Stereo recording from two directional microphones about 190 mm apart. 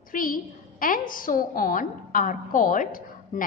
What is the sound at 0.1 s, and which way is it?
A woman's voice, 45° left (ahead or behind).